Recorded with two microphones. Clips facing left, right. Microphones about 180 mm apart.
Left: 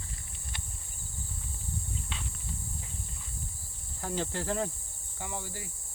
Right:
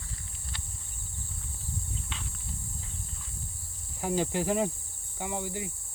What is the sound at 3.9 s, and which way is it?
Speech, 15° right (ahead or behind).